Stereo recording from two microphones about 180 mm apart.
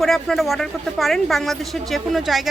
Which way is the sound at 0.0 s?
Centre (ahead or behind).